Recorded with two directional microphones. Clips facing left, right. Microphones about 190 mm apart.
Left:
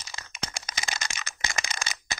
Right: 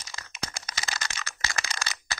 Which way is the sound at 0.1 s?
25° left (ahead or behind).